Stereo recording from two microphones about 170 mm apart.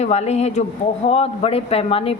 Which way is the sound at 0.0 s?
40° left (ahead or behind).